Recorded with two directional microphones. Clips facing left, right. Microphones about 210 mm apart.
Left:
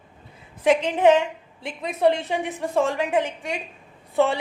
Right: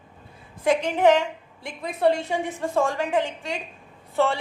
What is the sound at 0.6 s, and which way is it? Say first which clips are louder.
A woman's voice: left 2 dB; 20° left (ahead or behind).